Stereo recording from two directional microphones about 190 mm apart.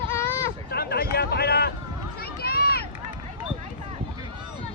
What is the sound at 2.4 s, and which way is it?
Run, 55° left (ahead or behind).